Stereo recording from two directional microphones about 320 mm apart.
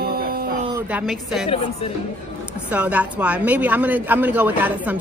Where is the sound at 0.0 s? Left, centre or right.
Right.